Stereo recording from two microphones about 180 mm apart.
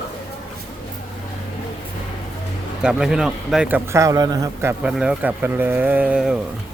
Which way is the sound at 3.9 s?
20° right (ahead or behind).